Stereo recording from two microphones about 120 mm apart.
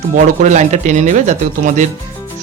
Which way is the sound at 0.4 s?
80° right.